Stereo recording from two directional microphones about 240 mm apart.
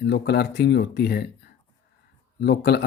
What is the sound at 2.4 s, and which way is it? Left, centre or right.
Speech, left.